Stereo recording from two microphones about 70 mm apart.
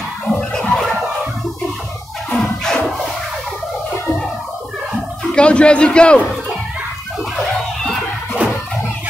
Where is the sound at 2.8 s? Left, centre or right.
Centre.